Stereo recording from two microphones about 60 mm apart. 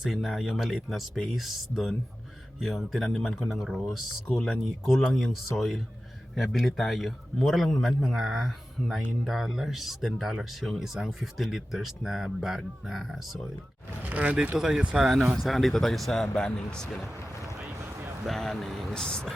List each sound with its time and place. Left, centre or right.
0.0 s speech: centre
14.0 s speech: right
14.5 s speech: centre
15.4 s speech: centre
16.2 s speech: centre
18.3 s speech: centre
18.9 s speech: centre